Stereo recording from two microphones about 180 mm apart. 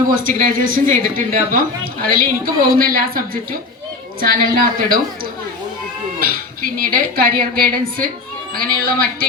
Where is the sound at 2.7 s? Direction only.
50° right (ahead or behind).